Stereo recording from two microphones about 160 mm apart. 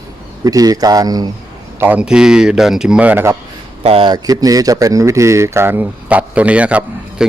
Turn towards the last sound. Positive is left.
turn(degrees=-10)  # may be behind; listen again after turning